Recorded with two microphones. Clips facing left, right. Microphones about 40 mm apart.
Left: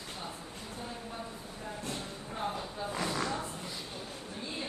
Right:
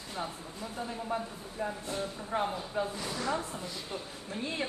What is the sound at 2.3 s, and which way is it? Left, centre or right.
Speech, right.